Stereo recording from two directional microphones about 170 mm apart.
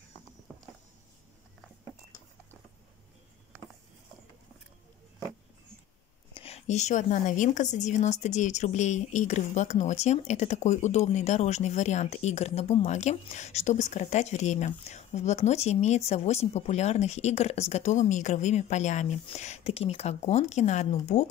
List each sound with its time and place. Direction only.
6.3 s a woman's voice: 35° left (ahead or behind)